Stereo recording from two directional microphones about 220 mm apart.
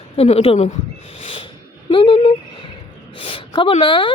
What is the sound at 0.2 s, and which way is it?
A man's voice, 25° left (ahead or behind).